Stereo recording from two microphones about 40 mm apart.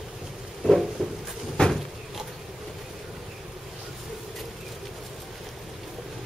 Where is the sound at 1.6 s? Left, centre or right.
Left.